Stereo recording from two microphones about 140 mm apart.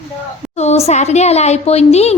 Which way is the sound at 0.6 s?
50° left (ahead or behind).